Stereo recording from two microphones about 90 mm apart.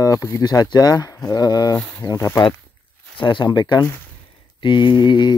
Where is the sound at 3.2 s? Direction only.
65° left (ahead or behind).